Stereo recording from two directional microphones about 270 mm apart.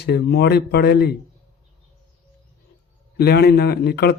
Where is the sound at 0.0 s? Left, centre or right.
Left.